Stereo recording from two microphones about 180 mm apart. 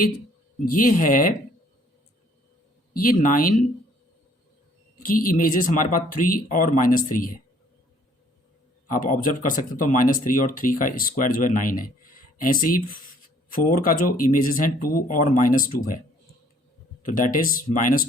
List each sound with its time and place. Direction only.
0.6 s speech: 50° left (ahead or behind)
3.0 s speech: 50° left (ahead or behind)
5.0 s speech: 50° left (ahead or behind)
8.9 s speech: 45° left (ahead or behind)
17.1 s speech: 50° left (ahead or behind)